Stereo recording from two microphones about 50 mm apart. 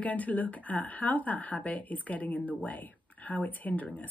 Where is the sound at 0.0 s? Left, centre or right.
Left.